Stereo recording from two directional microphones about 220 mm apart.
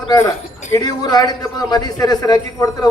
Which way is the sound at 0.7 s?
15° left (ahead or behind).